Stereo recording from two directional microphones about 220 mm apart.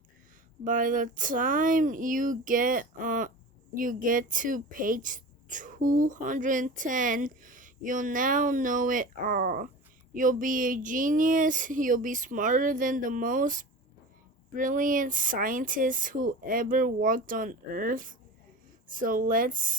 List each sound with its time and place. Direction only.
0.6 s speech: 40° right (ahead or behind)